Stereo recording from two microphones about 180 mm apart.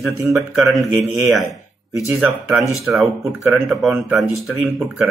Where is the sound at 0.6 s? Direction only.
20° right (ahead or behind).